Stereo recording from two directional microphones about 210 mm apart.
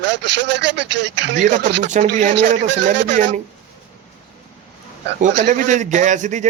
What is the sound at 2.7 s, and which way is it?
Speech, 60° right (ahead or behind).